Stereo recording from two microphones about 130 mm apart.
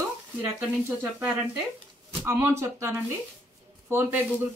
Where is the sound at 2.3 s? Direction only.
20° right (ahead or behind).